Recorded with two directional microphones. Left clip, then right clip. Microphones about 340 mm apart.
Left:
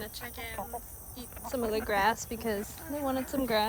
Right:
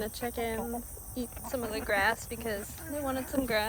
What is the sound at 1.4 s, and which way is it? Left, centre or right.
Speech, centre.